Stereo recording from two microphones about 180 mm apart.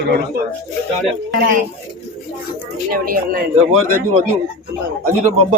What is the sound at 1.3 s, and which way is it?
Speech, 50° right (ahead or behind).